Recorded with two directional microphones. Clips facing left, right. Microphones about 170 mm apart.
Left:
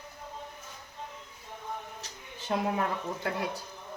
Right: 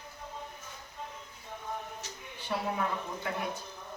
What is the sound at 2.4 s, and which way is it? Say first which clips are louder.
A woman's voice: left 3 dB; 45° left (ahead or behind).